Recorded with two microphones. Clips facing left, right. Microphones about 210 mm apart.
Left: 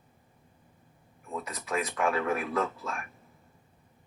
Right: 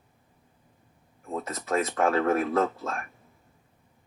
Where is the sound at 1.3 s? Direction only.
45° right (ahead or behind).